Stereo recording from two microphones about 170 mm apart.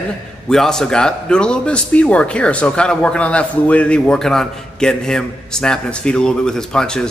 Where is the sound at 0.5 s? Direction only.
5° left (ahead or behind).